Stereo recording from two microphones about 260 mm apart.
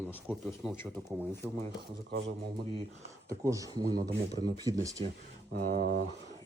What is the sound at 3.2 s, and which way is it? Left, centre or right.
Speech, centre.